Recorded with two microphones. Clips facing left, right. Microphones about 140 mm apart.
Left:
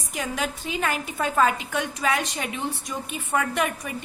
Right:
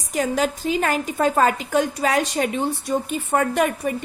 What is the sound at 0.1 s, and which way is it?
A woman's voice, 40° right (ahead or behind).